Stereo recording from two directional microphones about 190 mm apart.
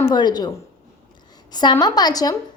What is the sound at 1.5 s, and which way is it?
Speech, 20° left (ahead or behind).